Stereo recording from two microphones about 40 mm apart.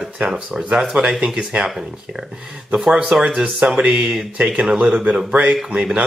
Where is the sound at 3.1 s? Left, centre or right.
Centre.